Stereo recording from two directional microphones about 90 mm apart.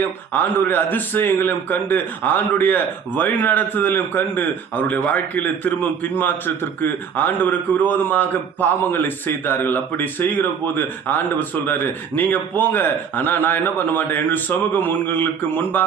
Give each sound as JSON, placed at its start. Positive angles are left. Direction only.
{"t": 0.3, "sound": "speech", "side_deg": 20}